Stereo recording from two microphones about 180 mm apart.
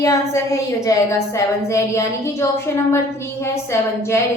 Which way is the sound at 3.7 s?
15° left (ahead or behind).